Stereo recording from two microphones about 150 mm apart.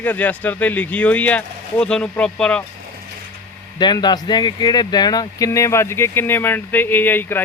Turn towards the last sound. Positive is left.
turn(degrees=15)  # may be behind; listen again after turning